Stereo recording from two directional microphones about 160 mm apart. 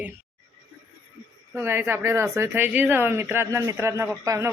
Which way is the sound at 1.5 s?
15° right (ahead or behind).